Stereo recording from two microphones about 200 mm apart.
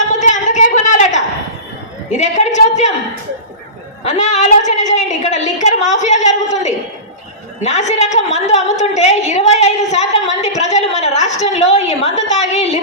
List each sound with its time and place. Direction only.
0.1 s a sound: 35° left (ahead or behind)
2.1 s a woman's voice: 35° left (ahead or behind)
4.0 s a woman's voice: 35° left (ahead or behind)